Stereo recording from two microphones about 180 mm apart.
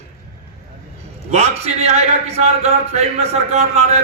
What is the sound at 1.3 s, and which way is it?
A man's voice, 35° right (ahead or behind).